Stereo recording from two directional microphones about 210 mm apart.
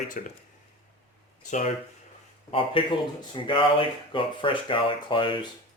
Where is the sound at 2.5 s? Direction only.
25° left (ahead or behind).